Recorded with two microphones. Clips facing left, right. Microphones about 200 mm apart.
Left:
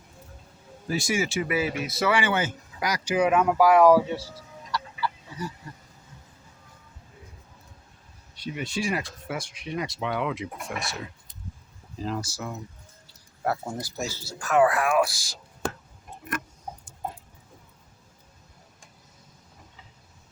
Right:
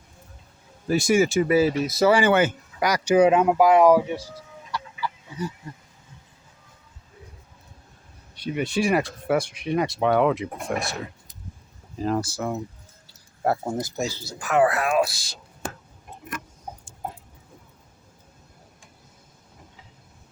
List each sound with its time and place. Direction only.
0.9 s speech: 50° right (ahead or behind)
2.3 s speech: 65° right (ahead or behind)
3.2 s speech: 25° right (ahead or behind)
8.4 s speech: 60° right (ahead or behind)
12.0 s speech: 55° right (ahead or behind)
13.4 s speech: 30° right (ahead or behind)
13.7 s speech: 20° right (ahead or behind)